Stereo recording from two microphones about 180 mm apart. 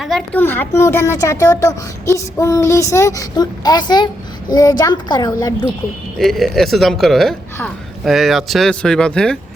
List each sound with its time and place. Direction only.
0.0 s speech: centre (ahead or behind)
0.3 s a child's voice: 10° left (ahead or behind)
6.1 s speech: centre (ahead or behind)